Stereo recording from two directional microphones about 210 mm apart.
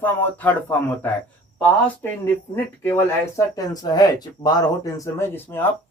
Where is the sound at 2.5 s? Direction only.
10° left (ahead or behind).